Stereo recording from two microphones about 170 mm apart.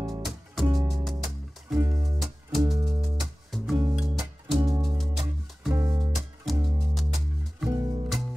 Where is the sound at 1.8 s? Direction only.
20° right (ahead or behind).